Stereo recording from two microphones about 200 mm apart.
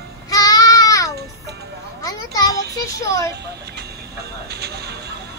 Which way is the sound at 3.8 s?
55° right (ahead or behind).